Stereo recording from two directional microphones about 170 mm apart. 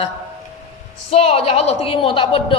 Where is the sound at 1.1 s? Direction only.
35° left (ahead or behind).